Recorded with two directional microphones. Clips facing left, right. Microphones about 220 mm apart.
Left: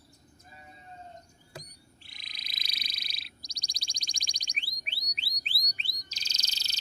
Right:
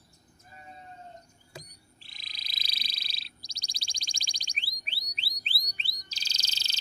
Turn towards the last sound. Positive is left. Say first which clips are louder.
# right 1 dB
turn(degrees=-30)  # may be behind; listen again after turning